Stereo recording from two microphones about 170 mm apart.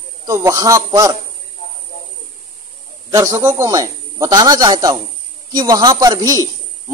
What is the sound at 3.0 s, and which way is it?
A man's voice, 20° right (ahead or behind).